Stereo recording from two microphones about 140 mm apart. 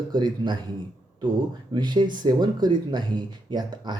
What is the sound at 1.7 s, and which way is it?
Speech, 30° right (ahead or behind).